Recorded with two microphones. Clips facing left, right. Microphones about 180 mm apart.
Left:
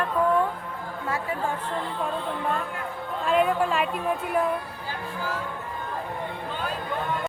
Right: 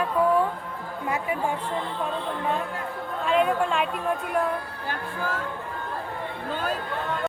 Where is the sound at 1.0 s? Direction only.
15° right (ahead or behind).